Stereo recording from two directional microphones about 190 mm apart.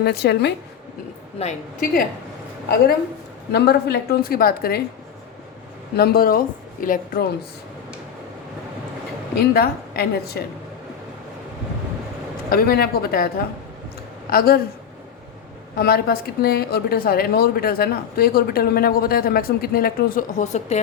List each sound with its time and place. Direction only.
0.0 s a woman's voice: 60° left (ahead or behind)
1.4 s a woman's voice: 40° left (ahead or behind)
3.5 s a woman's voice: 60° left (ahead or behind)
6.0 s a woman's voice: 55° left (ahead or behind)
9.3 s a woman's voice: 55° left (ahead or behind)
12.5 s a woman's voice: 55° left (ahead or behind)
14.3 s a woman's voice: 50° left (ahead or behind)
15.7 s a woman's voice: 55° left (ahead or behind); by 20.7 s 40° left (ahead or behind)